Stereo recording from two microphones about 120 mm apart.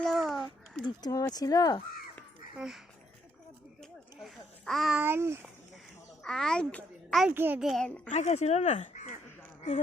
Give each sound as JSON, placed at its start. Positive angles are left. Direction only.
{"t": 0.0, "sound": "a sound", "side_deg": 0}
{"t": 0.9, "sound": "speech", "side_deg": 30}
{"t": 2.6, "sound": "a child's voice", "side_deg": -5}
{"t": 3.8, "sound": "a sound", "side_deg": 5}
{"t": 5.0, "sound": "a child's voice", "side_deg": -20}
{"t": 6.2, "sound": "a child's voice", "side_deg": 5}
{"t": 7.3, "sound": "a child's voice", "side_deg": -15}
{"t": 7.6, "sound": "a child's voice", "side_deg": 0}
{"t": 7.9, "sound": "a woman's voice", "side_deg": 10}
{"t": 8.1, "sound": "speech", "side_deg": 70}